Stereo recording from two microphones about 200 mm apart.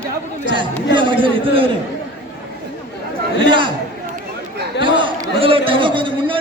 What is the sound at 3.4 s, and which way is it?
Chatter, 25° right (ahead or behind).